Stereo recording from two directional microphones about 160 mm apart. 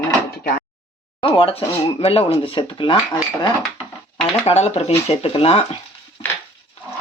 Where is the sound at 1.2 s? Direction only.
30° left (ahead or behind).